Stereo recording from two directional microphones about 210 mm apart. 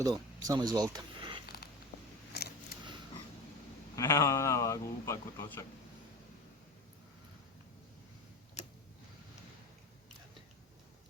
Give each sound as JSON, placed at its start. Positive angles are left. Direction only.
{"t": 0.0, "sound": "speech", "side_deg": -20}
{"t": 2.3, "sound": "a sound", "side_deg": 50}
{"t": 3.9, "sound": "speech", "side_deg": 15}